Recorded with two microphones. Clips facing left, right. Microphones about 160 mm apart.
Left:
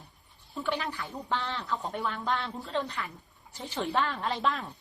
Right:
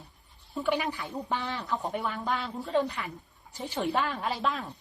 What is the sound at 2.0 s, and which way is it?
A woman's voice, 5° right (ahead or behind).